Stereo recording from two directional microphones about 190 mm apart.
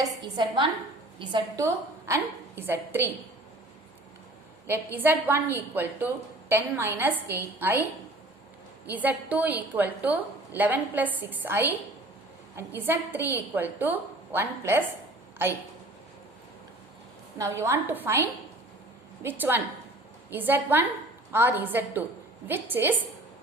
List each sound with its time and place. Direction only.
0.0 s a woman's voice: 25° right (ahead or behind)
4.6 s a woman's voice: 10° right (ahead or behind)
8.9 s a woman's voice: 10° right (ahead or behind)
17.3 s a woman's voice: 15° right (ahead or behind)